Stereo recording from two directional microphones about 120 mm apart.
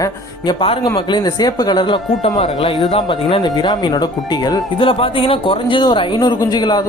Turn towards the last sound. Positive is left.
turn(degrees=35)  # may be behind; listen again after turning